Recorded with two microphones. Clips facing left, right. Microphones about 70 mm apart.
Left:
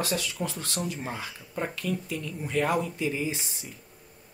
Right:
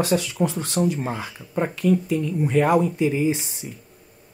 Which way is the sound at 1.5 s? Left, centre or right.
Right.